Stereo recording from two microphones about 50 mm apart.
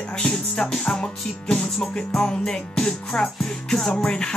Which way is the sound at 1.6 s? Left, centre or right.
Centre.